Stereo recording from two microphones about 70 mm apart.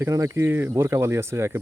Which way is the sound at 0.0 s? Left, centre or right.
Right.